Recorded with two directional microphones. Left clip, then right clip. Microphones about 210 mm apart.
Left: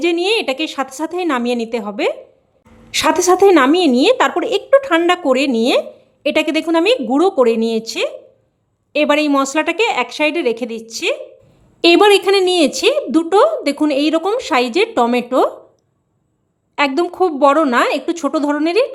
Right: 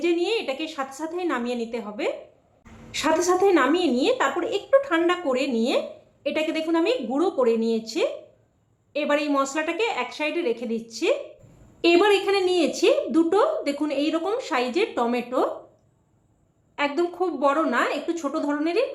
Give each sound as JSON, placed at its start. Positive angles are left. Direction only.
{"t": 0.0, "sound": "a woman's voice", "side_deg": 50}
{"t": 16.7, "sound": "a woman's voice", "side_deg": 50}